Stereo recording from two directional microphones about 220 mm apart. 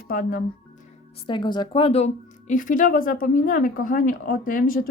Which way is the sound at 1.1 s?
20° left (ahead or behind).